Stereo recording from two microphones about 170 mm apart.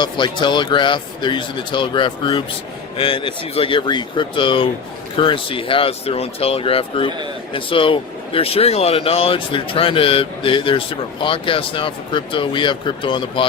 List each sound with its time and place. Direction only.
0.0 s speech: 25° left (ahead or behind)